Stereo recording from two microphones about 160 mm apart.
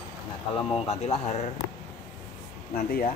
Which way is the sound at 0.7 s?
35° left (ahead or behind).